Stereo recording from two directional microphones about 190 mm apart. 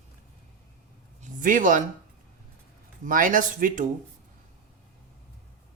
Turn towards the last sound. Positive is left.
turn(degrees=-45)  # may be behind; listen again after turning